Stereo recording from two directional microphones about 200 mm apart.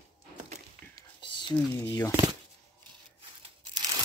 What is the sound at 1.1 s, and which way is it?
Whispering, 25° left (ahead or behind).